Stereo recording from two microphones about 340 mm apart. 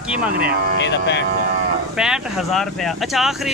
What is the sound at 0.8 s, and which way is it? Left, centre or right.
Speech, left.